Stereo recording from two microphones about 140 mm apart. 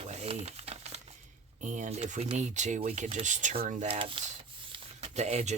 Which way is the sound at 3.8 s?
40° right (ahead or behind).